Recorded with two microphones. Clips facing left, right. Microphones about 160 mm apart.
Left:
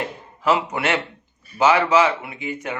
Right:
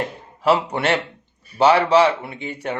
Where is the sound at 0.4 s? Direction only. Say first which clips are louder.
Right 2 dB; 35° right (ahead or behind).